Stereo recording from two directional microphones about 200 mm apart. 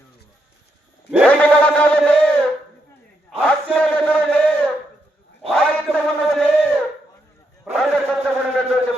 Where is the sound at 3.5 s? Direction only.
5° left (ahead or behind).